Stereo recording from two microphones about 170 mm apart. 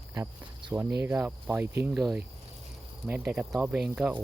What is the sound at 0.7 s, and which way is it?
Speech, 10° right (ahead or behind).